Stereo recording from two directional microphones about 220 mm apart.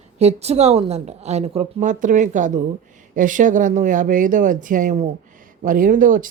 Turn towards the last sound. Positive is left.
turn(degrees=-35)  # may be behind; listen again after turning